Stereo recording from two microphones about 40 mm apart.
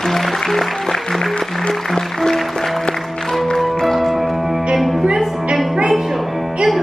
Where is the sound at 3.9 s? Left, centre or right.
Centre.